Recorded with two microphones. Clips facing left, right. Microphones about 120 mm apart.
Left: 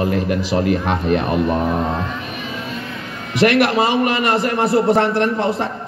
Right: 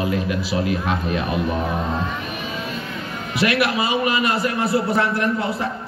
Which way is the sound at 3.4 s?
50° left (ahead or behind).